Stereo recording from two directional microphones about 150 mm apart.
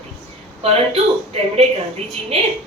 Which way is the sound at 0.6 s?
45° right (ahead or behind).